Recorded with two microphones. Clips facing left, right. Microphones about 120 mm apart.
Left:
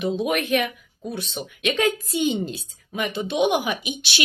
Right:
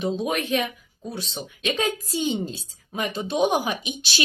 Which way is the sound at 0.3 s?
30° right (ahead or behind).